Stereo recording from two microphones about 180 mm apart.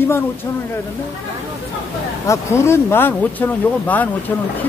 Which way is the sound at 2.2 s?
15° left (ahead or behind).